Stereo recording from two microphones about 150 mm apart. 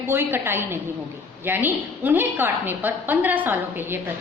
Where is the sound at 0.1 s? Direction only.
15° right (ahead or behind).